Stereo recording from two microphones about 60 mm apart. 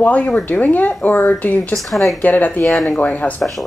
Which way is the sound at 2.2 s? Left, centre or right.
Left.